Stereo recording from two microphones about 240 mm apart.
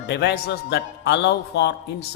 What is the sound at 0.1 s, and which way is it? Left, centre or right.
A man's voice, left.